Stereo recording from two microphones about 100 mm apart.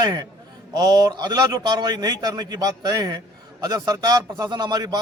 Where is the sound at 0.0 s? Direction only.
40° right (ahead or behind).